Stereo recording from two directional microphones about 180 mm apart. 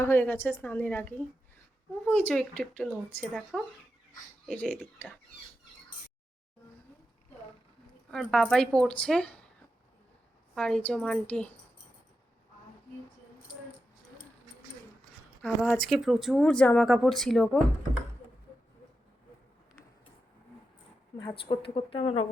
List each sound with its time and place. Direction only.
0.0 s speech: 10° left (ahead or behind)
8.1 s speech: 5° left (ahead or behind)
10.5 s speech: 5° left (ahead or behind)
15.4 s speech: 5° left (ahead or behind)
21.4 s speech: 30° left (ahead or behind)